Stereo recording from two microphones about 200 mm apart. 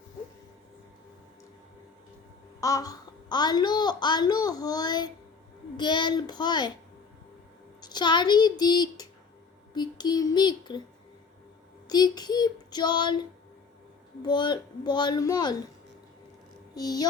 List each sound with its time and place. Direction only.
2.6 s a child's voice: 15° left (ahead or behind)
7.8 s a child's voice: 20° left (ahead or behind)
11.9 s a child's voice: 20° left (ahead or behind)
14.2 s a child's voice: 20° left (ahead or behind)
16.7 s a child's voice: 20° left (ahead or behind)